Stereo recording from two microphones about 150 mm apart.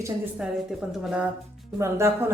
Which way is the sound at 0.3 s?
5° right (ahead or behind).